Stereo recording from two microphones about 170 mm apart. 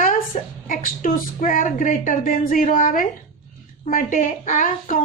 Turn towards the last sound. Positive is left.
turn(degrees=50)  # may be behind; listen again after turning